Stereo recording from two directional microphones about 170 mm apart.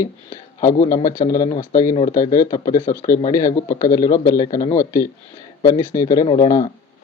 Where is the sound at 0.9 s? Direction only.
20° left (ahead or behind).